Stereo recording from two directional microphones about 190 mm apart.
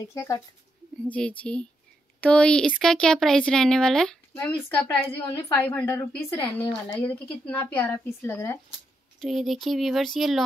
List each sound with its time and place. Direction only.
0.1 s speech: 15° left (ahead or behind)
9.2 s speech: centre (ahead or behind)